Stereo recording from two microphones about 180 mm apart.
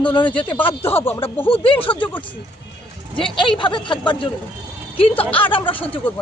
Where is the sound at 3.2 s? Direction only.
30° left (ahead or behind).